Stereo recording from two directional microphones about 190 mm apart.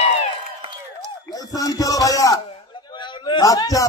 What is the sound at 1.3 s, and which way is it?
Speech, 20° left (ahead or behind).